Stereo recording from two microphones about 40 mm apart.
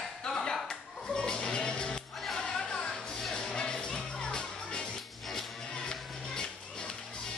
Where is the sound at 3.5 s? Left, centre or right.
Left.